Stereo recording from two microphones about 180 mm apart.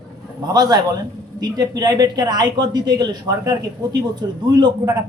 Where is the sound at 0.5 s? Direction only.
20° right (ahead or behind).